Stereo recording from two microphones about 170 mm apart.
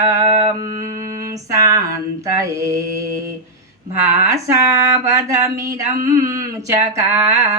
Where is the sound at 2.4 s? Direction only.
20° right (ahead or behind).